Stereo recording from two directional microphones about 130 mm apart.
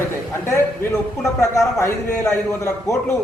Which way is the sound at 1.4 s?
20° left (ahead or behind).